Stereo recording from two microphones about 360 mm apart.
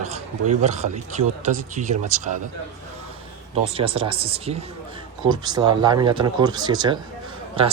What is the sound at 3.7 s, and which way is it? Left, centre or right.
Speech, centre.